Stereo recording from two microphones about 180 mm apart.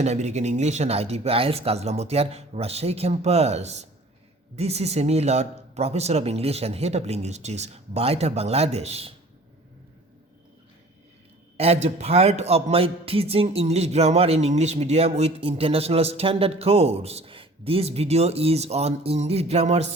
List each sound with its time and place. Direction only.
0.0 s a man's voice: 40° right (ahead or behind)
11.5 s a man's voice: 35° right (ahead or behind)